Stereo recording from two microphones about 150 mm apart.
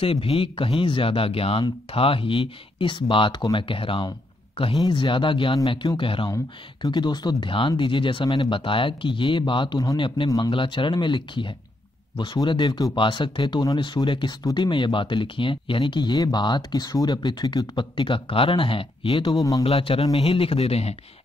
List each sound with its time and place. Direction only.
0.0 s speech: 40° left (ahead or behind)
19.6 s speech: 40° left (ahead or behind)